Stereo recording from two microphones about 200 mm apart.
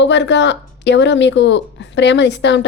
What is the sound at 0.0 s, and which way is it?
Speech, 60° left (ahead or behind).